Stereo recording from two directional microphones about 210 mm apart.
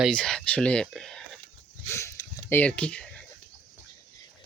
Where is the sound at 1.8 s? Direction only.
15° left (ahead or behind).